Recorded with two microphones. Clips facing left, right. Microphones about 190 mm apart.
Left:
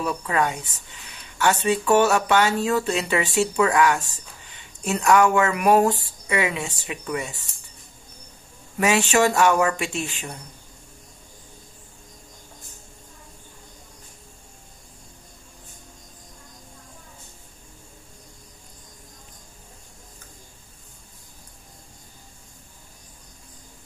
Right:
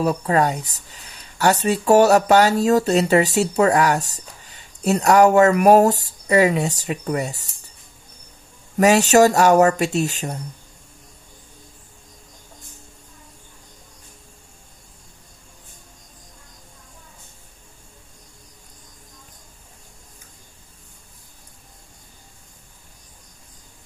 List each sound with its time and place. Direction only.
0.0 s speech: 40° right (ahead or behind)
8.7 s speech: 40° right (ahead or behind)